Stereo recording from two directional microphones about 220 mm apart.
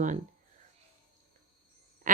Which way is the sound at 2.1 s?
35° right (ahead or behind).